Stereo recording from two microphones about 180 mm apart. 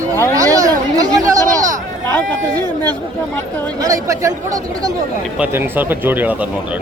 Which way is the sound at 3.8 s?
20° right (ahead or behind).